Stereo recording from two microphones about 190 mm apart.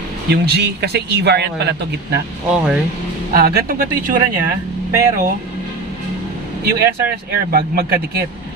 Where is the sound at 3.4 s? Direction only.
50° right (ahead or behind).